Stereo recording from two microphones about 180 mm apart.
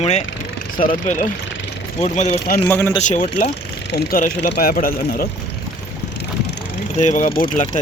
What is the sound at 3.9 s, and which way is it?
Speech, 60° left (ahead or behind).